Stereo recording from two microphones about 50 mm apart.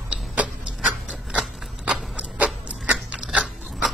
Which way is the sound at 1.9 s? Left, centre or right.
Right.